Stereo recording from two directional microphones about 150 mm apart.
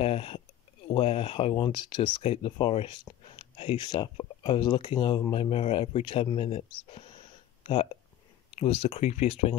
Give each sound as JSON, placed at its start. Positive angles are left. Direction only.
{"t": 0.0, "sound": "speech", "side_deg": 40}